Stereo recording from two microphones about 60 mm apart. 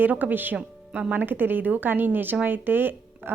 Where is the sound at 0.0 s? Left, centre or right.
Right.